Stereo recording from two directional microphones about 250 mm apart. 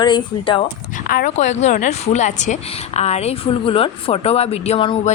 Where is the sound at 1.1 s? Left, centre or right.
Left.